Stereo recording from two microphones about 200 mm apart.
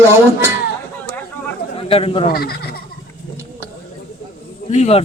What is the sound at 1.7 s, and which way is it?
Speech, 30° left (ahead or behind).